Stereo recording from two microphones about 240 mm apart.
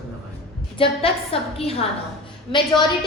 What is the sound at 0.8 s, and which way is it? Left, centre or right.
A woman's voice, left.